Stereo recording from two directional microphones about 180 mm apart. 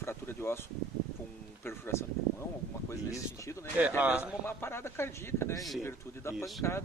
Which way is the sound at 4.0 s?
10° right (ahead or behind).